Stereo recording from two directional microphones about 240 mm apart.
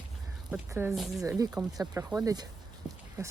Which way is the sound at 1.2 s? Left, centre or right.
Centre.